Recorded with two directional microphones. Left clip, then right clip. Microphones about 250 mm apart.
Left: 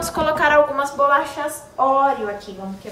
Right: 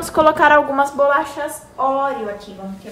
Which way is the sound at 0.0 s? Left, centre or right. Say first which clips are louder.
Right 5 dB; centre.